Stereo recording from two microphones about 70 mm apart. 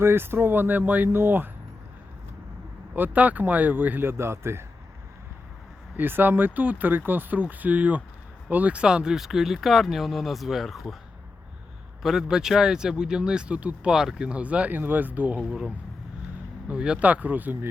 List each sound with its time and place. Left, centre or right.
0.0 s speech: right
2.9 s speech: right
6.0 s speech: right; by 10.9 s centre
12.0 s speech: centre; by 15.4 s right
15.4 s speech: centre; by 17.7 s right